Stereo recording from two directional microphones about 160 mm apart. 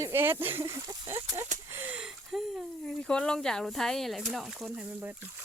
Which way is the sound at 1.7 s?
10° right (ahead or behind).